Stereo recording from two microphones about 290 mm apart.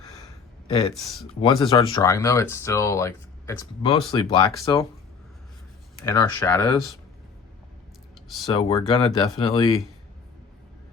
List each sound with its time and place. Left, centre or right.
0.7 s speech: centre
0.9 s speech: centre
1.4 s speech: centre
6.1 s speech: centre
8.5 s speech: centre